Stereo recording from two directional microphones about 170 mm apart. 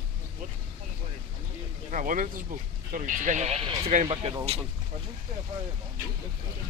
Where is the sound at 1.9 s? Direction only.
50° right (ahead or behind).